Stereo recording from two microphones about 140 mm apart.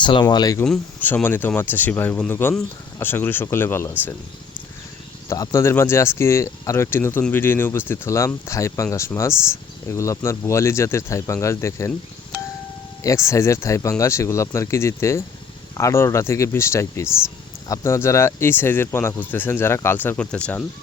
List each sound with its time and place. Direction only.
0.0 s speech: 35° left (ahead or behind)
0.6 s speech: 10° left (ahead or behind)
5.3 s speech: 25° left (ahead or behind)
13.0 s speech: 20° left (ahead or behind)